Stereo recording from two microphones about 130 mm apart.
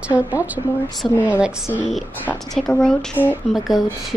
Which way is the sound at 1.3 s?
10° right (ahead or behind).